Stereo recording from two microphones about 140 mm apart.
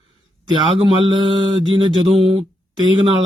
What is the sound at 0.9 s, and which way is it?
Mantra, 35° right (ahead or behind).